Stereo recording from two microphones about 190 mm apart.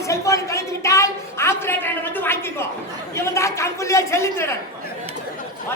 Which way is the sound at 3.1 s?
15° left (ahead or behind).